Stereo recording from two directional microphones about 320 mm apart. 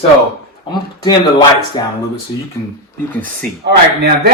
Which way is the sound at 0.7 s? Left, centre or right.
Centre.